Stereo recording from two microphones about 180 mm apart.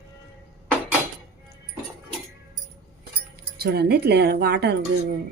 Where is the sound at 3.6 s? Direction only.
60° right (ahead or behind).